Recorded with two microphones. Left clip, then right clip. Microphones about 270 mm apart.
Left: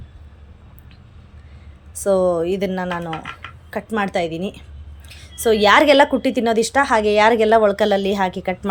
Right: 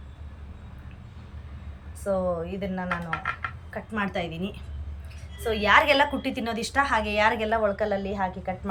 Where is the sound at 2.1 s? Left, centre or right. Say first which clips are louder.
Left 11 dB; left.